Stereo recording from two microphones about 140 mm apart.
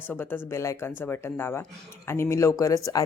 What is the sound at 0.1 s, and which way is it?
Speech, 15° left (ahead or behind).